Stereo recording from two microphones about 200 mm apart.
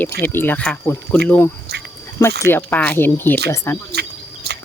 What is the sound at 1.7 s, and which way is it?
Duck, 55° right (ahead or behind).